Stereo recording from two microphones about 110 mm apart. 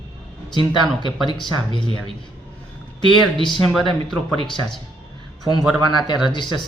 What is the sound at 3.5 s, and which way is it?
Speech, 5° left (ahead or behind).